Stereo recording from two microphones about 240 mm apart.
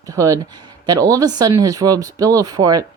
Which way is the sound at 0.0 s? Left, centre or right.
Centre.